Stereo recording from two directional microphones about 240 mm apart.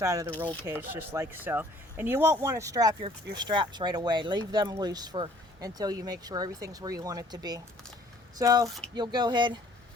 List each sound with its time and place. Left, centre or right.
0.0 s speech: centre